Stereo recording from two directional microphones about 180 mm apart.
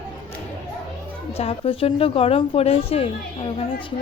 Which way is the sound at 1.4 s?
35° left (ahead or behind).